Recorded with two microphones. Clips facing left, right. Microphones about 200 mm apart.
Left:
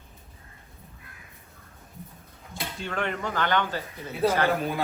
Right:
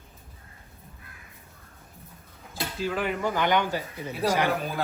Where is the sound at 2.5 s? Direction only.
5° right (ahead or behind).